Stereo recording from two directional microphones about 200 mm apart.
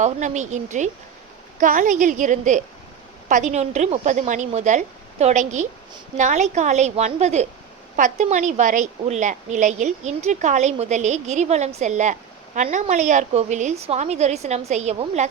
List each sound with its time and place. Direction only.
0.0 s a woman's voice: 35° right (ahead or behind)